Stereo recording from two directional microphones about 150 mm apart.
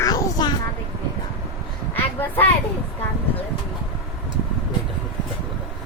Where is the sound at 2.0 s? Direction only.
15° left (ahead or behind).